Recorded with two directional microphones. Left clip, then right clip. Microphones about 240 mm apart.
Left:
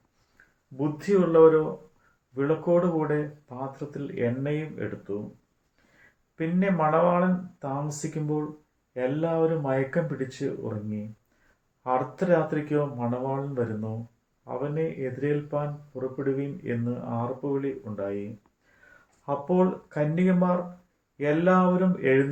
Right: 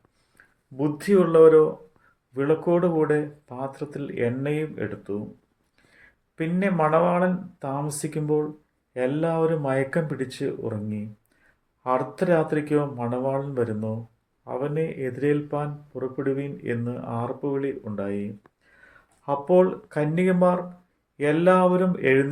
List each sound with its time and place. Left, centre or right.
0.8 s speech: right
6.3 s speech: right